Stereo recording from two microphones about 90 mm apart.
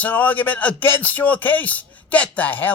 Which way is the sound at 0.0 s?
20° left (ahead or behind).